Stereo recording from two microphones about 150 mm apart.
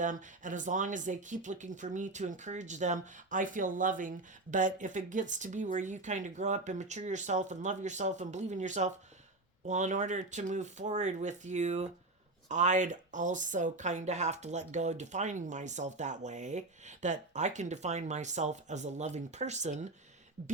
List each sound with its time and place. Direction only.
0.0 s speech: 55° right (ahead or behind)